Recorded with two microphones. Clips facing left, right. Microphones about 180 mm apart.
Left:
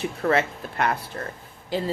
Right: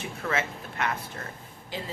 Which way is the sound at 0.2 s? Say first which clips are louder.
Left 7 dB; 40° left (ahead or behind).